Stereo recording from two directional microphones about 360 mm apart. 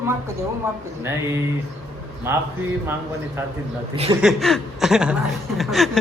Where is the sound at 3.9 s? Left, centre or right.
Centre.